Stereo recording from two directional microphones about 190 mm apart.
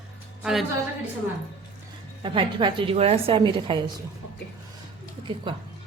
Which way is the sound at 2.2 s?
25° right (ahead or behind).